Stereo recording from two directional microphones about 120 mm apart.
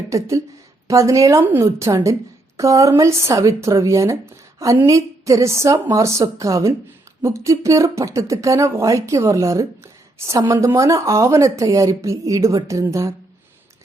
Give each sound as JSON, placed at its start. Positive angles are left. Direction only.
{"t": 0.1, "sound": "speech", "side_deg": -25}